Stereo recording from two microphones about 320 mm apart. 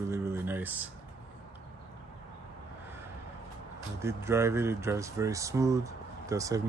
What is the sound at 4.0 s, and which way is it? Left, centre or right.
Speech, centre.